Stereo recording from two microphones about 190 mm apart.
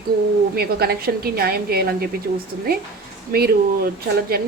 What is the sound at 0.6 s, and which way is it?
A woman's voice, 55° right (ahead or behind).